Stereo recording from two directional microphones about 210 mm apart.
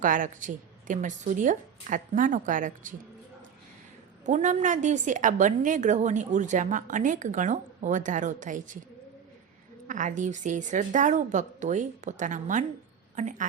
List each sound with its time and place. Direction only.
0.0 s a woman's voice: 40° right (ahead or behind)
4.3 s a woman's voice: 35° right (ahead or behind)
9.8 s a woman's voice: 40° right (ahead or behind)